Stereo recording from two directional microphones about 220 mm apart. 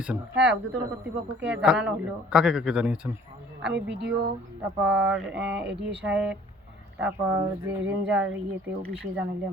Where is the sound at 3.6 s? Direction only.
50° right (ahead or behind).